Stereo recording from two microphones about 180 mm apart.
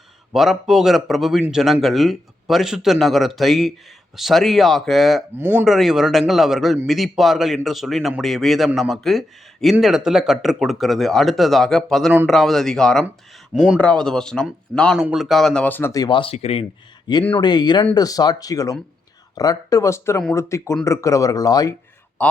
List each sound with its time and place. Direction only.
0.3 s speech: centre (ahead or behind); by 21.8 s 20° left (ahead or behind)
22.2 s a man's voice: 10° left (ahead or behind)